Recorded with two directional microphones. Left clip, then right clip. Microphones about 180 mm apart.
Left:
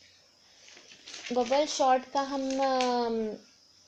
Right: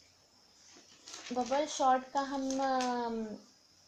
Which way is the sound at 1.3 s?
40° left (ahead or behind).